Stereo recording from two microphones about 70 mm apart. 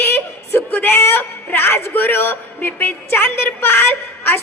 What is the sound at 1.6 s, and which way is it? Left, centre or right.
A woman's voice, left.